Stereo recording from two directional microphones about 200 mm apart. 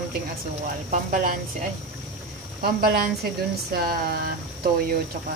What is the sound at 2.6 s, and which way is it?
A woman's voice, 50° right (ahead or behind).